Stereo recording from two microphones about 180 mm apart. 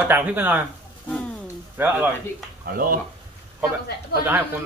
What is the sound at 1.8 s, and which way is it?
Speech, 10° right (ahead or behind).